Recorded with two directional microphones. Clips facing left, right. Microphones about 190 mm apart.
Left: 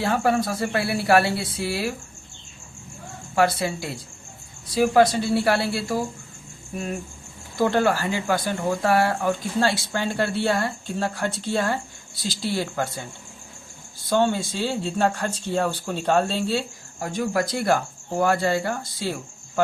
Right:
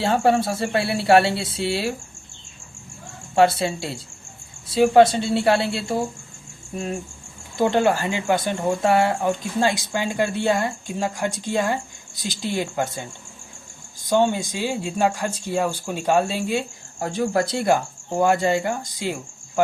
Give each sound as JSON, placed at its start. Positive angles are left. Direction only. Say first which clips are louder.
{"t": 0.0, "sound": "speech", "louder": "right 3 dB", "side_deg": -30}
{"t": 3.3, "sound": "speech", "louder": "right 3 dB", "side_deg": -25}
{"t": 7.5, "sound": "speech", "louder": "right 2 dB", "side_deg": -20}
{"t": 17.0, "sound": "speech", "louder": "right 2 dB", "side_deg": -30}